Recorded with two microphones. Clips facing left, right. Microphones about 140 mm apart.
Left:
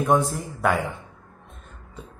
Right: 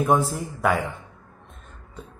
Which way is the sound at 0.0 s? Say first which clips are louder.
Even; 5° right (ahead or behind).